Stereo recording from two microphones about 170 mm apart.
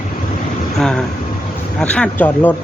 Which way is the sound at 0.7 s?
5° left (ahead or behind).